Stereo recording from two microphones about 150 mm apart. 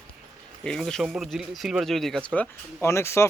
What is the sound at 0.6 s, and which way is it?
Speech, 5° left (ahead or behind).